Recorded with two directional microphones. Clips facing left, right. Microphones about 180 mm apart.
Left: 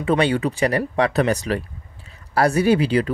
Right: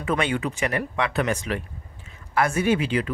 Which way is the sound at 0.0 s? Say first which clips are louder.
Left 6 dB; 30° left (ahead or behind).